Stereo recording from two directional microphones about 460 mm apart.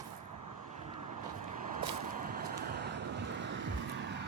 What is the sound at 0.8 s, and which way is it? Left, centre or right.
Vehicle, centre.